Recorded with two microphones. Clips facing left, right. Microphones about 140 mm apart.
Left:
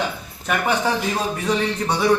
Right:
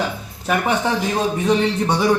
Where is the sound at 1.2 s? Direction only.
20° right (ahead or behind).